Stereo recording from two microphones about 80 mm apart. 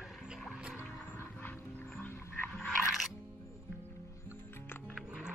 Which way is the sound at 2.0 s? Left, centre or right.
Left.